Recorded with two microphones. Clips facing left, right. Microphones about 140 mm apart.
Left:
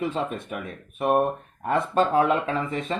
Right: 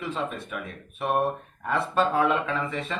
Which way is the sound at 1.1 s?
45° left (ahead or behind).